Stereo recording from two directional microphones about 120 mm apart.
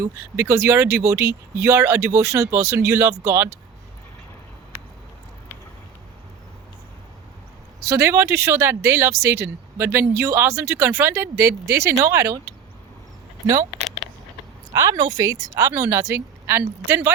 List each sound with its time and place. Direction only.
0.0 s speech: 20° right (ahead or behind)
7.9 s speech: 25° right (ahead or behind)
14.7 s a woman's voice: 25° right (ahead or behind)